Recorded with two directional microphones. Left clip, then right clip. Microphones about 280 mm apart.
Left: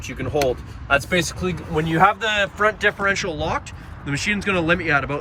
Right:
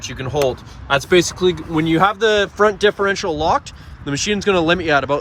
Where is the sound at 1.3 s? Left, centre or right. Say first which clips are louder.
Right 8 dB; centre.